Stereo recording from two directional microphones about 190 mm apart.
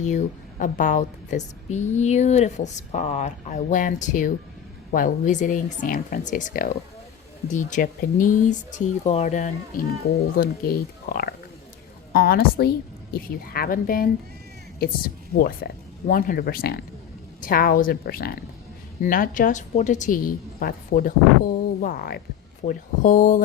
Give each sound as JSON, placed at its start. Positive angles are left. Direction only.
{"t": 0.0, "sound": "a woman's voice", "side_deg": 40}